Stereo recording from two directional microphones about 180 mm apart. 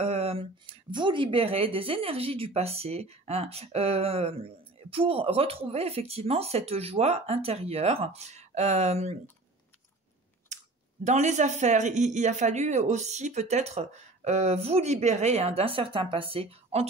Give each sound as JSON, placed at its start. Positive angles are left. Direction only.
{"t": 0.0, "sound": "speech", "side_deg": -35}
{"t": 10.5, "sound": "clicking", "side_deg": -40}
{"t": 11.1, "sound": "speech", "side_deg": -40}